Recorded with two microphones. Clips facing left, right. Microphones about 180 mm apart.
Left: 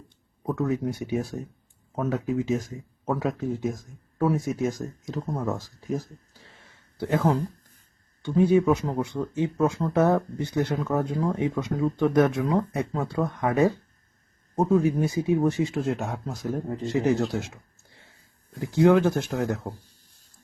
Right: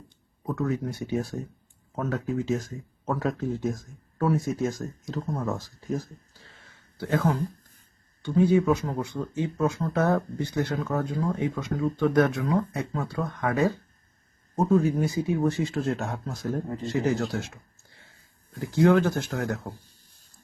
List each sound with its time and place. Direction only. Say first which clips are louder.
0.4 s speech: left 2 dB; 15° left (ahead or behind)
6.5 s a sound: left 1 dB; 20° left (ahead or behind)
8.2 s speech: left 1 dB; 20° left (ahead or behind)
18.6 s speech: left 2 dB; 20° left (ahead or behind)